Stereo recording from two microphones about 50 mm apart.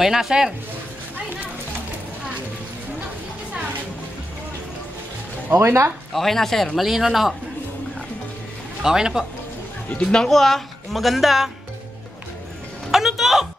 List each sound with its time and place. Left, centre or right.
0.0 s speech: centre
5.5 s speech: right
6.1 s speech: centre
6.8 s speech: centre
8.8 s speech: centre
9.9 s speech: centre
12.9 s music: centre